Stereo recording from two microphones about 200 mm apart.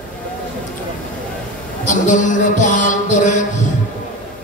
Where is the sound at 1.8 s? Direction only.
40° left (ahead or behind).